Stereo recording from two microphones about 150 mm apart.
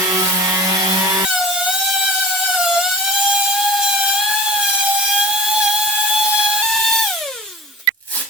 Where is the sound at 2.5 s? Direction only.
5° right (ahead or behind).